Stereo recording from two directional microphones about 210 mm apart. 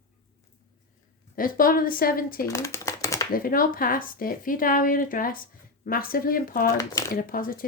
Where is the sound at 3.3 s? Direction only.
45° left (ahead or behind).